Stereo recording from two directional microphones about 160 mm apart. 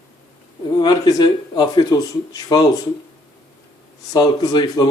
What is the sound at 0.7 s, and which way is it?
Speech, 25° left (ahead or behind).